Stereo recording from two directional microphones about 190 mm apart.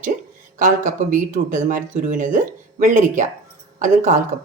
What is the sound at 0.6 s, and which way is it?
A woman's voice, 45° right (ahead or behind).